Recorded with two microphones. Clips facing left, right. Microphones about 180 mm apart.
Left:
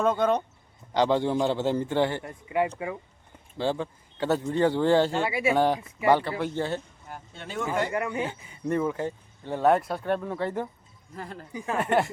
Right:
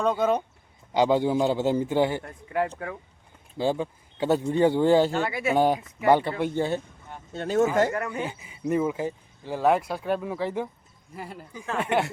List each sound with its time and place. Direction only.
0.0 s speech: centre (ahead or behind)
2.2 s speech: 5° left (ahead or behind)
3.6 s speech: 15° right (ahead or behind)
5.1 s speech: 10° left (ahead or behind)
5.5 s speech: 15° right (ahead or behind)
7.3 s speech: 40° right (ahead or behind)
7.9 s speech: 10° left (ahead or behind)
8.2 s speech: 10° right (ahead or behind)
11.5 s speech: 15° left (ahead or behind)
11.8 s speech: centre (ahead or behind)